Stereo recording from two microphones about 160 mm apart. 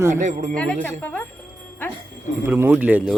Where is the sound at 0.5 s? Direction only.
5° left (ahead or behind).